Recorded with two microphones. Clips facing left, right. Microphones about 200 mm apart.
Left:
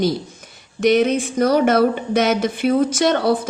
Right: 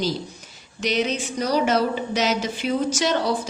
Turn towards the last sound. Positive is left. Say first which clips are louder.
# left 5 dB
turn(degrees=60)  # may be behind; listen again after turning